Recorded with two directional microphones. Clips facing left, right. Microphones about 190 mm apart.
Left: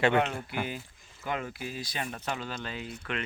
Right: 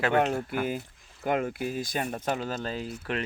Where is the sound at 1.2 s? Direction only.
50° right (ahead or behind).